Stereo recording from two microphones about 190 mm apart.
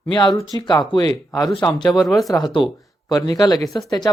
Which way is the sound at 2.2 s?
20° left (ahead or behind).